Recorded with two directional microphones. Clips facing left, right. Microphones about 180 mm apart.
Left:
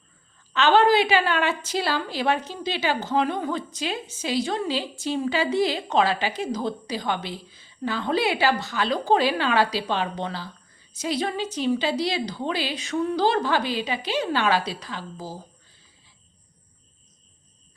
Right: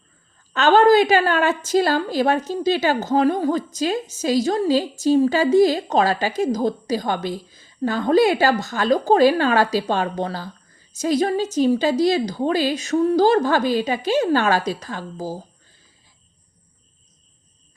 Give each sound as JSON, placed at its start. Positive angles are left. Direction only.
{"t": 0.5, "sound": "a woman's voice", "side_deg": -45}